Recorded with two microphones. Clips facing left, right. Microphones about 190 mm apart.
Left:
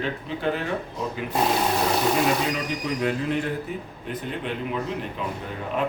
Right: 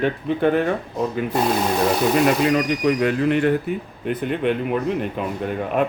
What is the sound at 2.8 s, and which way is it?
Speech, 65° right (ahead or behind).